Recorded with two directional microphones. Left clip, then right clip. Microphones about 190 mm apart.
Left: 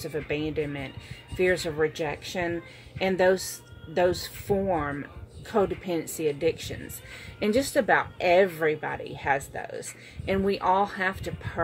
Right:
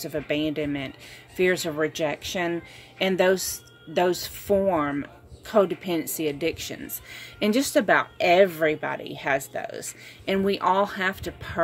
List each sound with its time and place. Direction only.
0.0 s speech: 55° right (ahead or behind)